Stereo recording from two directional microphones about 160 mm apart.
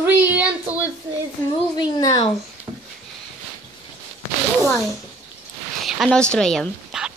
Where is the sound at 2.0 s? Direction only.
25° left (ahead or behind).